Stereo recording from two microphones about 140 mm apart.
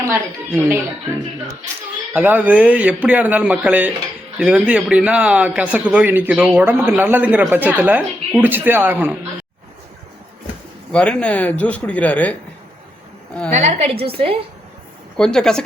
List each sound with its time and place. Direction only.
0.1 s a woman's voice: 20° right (ahead or behind)
2.1 s a woman's voice: 10° right (ahead or behind)
10.9 s speech: 10° left (ahead or behind)
13.6 s a woman's voice: 50° right (ahead or behind)
15.2 s speech: 5° left (ahead or behind)